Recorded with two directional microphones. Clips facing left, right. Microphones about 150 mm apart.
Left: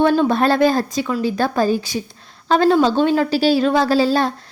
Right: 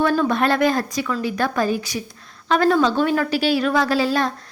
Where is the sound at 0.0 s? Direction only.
30° left (ahead or behind).